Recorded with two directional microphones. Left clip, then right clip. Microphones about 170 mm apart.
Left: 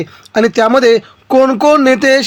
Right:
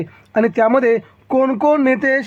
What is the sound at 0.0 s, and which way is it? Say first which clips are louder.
Speech: left 5 dB; 30° left (ahead or behind).